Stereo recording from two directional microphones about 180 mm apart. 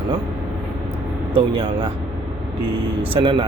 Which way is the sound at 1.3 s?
30° right (ahead or behind).